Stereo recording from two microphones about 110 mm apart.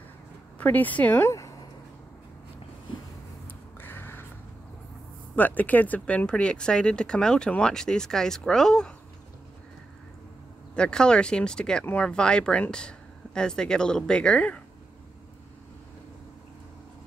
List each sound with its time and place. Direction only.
0.6 s speech: 15° left (ahead or behind)
3.8 s a sound: 20° left (ahead or behind)
5.3 s speech: 15° left (ahead or behind)
10.7 s speech: 10° left (ahead or behind)